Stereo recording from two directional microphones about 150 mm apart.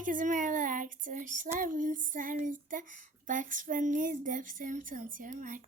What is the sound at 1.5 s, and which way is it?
Child singing, 60° right (ahead or behind).